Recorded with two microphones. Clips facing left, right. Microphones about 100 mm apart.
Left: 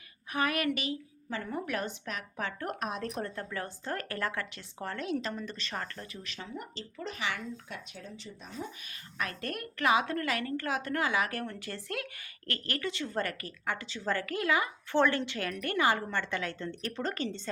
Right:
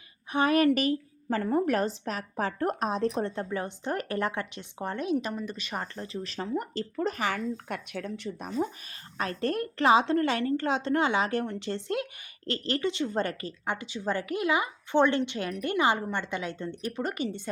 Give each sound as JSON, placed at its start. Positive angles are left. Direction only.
{"t": 0.3, "sound": "a woman's voice", "side_deg": -30}
{"t": 6.2, "sound": "speech", "side_deg": -40}
{"t": 7.9, "sound": "speech", "side_deg": -65}
{"t": 9.1, "sound": "a woman's voice", "side_deg": -30}